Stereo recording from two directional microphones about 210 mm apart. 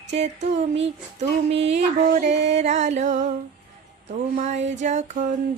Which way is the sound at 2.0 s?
35° right (ahead or behind).